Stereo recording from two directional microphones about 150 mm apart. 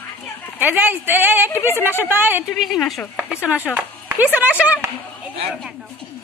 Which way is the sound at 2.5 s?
Centre (ahead or behind).